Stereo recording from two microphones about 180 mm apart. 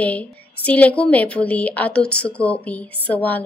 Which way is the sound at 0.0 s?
10° left (ahead or behind).